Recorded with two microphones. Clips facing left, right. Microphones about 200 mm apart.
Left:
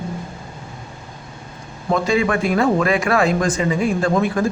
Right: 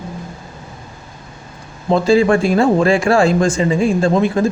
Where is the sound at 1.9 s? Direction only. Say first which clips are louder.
Right 6 dB; 30° right (ahead or behind).